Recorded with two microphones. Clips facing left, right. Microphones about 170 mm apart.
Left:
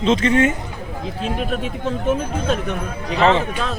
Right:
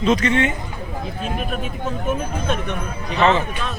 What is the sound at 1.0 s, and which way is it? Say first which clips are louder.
Speech: left 4 dB; 90° left.